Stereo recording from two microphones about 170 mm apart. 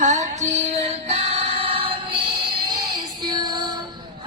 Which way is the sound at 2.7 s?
25° right (ahead or behind).